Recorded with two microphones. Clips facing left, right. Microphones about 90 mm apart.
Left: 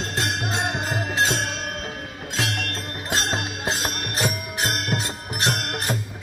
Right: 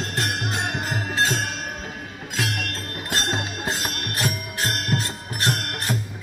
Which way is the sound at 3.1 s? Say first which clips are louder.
Left 1 dB; 25° left (ahead or behind).